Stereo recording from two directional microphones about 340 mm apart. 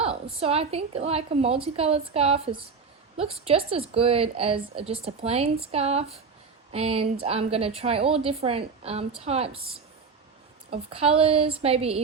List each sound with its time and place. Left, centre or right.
0.0 s a woman's voice: centre